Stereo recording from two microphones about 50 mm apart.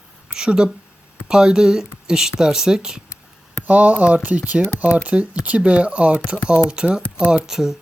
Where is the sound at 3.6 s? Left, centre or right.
Right.